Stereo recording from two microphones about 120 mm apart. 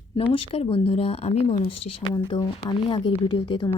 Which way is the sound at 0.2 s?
55° left (ahead or behind).